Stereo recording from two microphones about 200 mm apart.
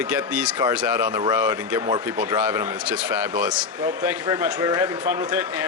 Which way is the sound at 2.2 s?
10° right (ahead or behind).